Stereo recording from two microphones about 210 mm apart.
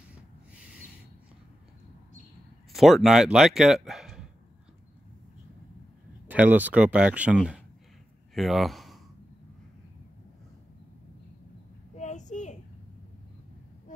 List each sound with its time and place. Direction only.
2.7 s speech: centre (ahead or behind)
6.2 s speech: 10° right (ahead or behind)
12.0 s a sound: 35° left (ahead or behind)